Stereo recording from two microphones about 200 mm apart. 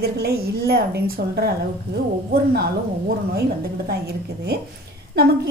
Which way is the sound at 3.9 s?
50° right (ahead or behind).